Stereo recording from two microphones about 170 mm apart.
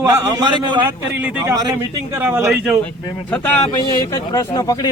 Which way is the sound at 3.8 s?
20° left (ahead or behind).